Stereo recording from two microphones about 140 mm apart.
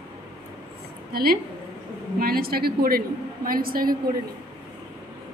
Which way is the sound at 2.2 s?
90° right.